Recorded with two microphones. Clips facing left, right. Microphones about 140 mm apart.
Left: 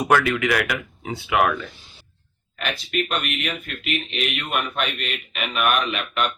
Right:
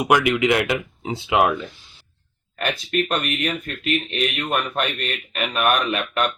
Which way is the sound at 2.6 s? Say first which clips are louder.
Right 3 dB; 40° right (ahead or behind).